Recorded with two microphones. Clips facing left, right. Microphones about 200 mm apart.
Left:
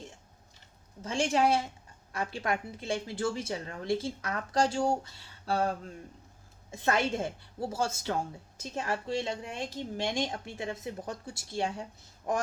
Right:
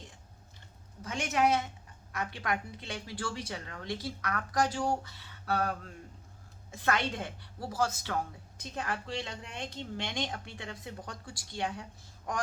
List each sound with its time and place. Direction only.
1.0 s a woman's voice: 30° left (ahead or behind)